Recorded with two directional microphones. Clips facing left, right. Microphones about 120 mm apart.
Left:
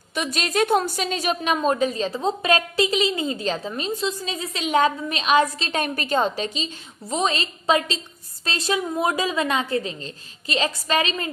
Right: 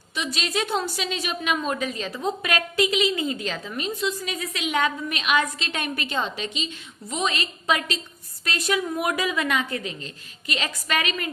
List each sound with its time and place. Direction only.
0.1 s a woman's voice: 50° left (ahead or behind); by 11.3 s 30° left (ahead or behind)